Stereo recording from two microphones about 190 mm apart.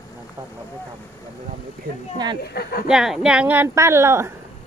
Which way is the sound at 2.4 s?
55° left (ahead or behind).